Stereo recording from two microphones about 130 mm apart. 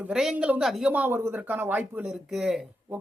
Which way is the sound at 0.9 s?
15° right (ahead or behind).